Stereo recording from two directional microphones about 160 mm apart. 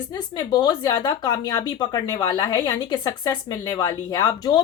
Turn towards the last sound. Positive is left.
turn(degrees=25)  # may be behind; listen again after turning